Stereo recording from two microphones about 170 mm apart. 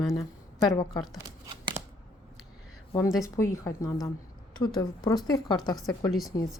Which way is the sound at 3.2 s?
15° left (ahead or behind).